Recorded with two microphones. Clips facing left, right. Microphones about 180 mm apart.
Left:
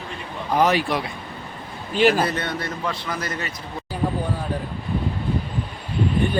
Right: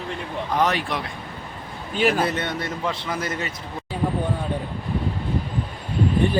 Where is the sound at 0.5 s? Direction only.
5° left (ahead or behind).